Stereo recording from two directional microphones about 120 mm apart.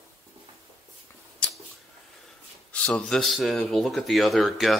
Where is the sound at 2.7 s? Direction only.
5° left (ahead or behind).